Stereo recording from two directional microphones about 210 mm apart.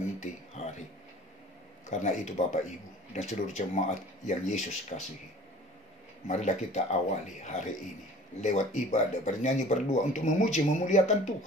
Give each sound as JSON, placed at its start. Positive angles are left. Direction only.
{"t": 0.2, "sound": "a sound", "side_deg": 35}
{"t": 1.9, "sound": "speech", "side_deg": 35}
{"t": 6.2, "sound": "speech", "side_deg": 35}